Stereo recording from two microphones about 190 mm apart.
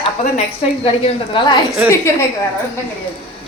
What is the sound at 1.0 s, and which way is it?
Speech, 25° left (ahead or behind).